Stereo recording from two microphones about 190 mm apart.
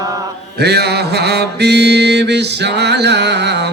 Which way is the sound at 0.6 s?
60° right (ahead or behind).